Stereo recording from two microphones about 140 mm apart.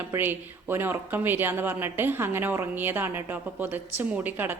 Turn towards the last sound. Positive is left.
turn(degrees=-15)  # may be behind; listen again after turning